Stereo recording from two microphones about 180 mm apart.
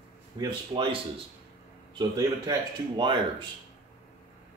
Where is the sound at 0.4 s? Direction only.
25° right (ahead or behind).